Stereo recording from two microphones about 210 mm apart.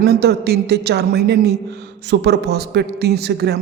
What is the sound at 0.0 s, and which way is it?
A woman's voice, 50° right (ahead or behind).